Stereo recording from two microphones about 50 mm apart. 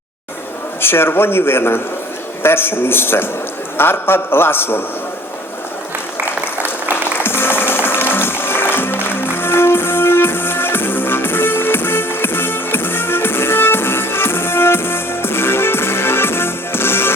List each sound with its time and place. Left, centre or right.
0.8 s speech: left
6.9 s music: left